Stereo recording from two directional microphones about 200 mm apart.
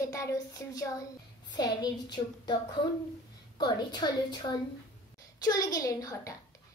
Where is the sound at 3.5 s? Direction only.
20° left (ahead or behind).